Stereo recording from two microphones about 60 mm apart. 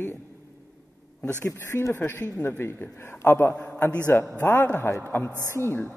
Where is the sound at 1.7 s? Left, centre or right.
Left.